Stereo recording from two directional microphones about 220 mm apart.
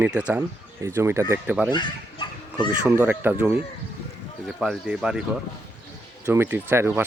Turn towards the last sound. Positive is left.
turn(degrees=-10)  # may be behind; listen again after turning